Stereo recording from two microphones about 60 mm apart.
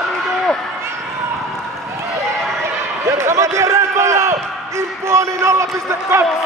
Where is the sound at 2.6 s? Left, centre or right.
Right.